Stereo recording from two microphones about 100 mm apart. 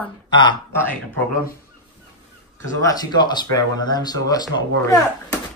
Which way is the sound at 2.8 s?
40° left (ahead or behind).